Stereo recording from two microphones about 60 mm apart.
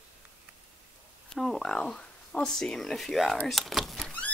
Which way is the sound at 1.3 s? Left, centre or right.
Centre.